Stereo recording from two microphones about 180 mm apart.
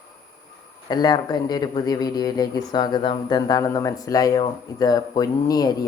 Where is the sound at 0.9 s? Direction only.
25° left (ahead or behind).